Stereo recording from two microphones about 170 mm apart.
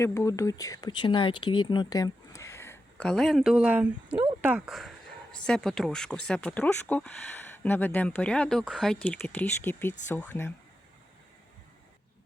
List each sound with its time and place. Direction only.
0.0 s speech: 15° left (ahead or behind)